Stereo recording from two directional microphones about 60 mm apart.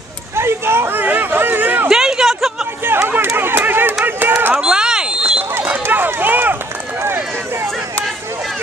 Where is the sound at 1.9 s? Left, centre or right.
Centre.